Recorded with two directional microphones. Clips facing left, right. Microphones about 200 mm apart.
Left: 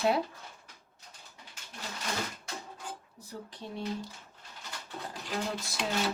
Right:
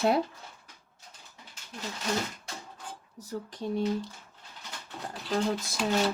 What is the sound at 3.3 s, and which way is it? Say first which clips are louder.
Speech: right 7 dB; 45° right (ahead or behind).